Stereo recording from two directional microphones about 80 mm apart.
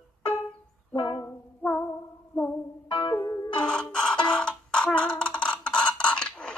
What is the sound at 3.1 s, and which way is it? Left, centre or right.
Music, left.